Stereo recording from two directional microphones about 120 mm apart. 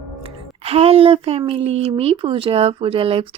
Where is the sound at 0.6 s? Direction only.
55° right (ahead or behind).